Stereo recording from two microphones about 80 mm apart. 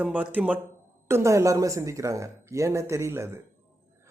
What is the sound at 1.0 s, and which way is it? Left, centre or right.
Speech, right.